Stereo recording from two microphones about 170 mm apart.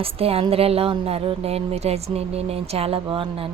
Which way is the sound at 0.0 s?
35° right (ahead or behind).